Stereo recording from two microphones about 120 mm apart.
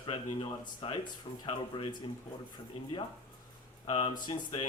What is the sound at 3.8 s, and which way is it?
Speech, 60° left (ahead or behind).